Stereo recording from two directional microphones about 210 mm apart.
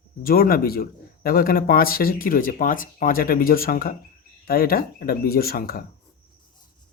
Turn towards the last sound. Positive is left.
turn(degrees=45)  # may be behind; listen again after turning